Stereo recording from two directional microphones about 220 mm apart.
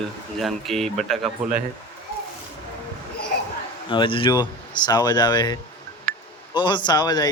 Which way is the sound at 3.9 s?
20° left (ahead or behind).